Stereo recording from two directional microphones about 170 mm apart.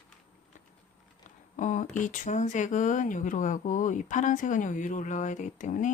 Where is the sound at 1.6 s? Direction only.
45° left (ahead or behind).